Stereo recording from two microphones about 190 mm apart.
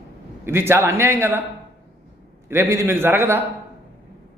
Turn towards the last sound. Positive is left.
turn(degrees=-10)  # may be behind; listen again after turning